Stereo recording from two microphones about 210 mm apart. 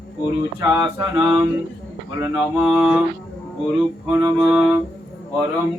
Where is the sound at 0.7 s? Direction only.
15° right (ahead or behind).